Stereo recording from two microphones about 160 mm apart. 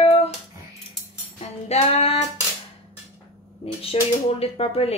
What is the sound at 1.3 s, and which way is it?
Music, 40° left (ahead or behind).